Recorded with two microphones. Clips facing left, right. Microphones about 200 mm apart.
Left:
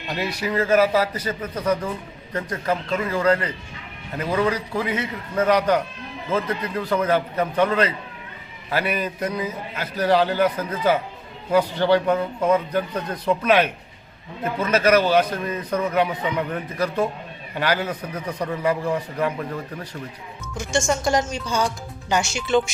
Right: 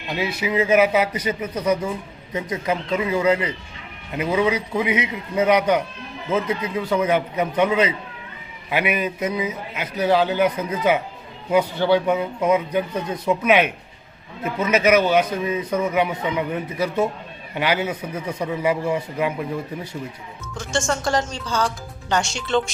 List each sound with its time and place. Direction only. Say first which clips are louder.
0.1 s a man's voice: right 2 dB; 10° right (ahead or behind)
20.6 s speech: left 1 dB; 10° left (ahead or behind)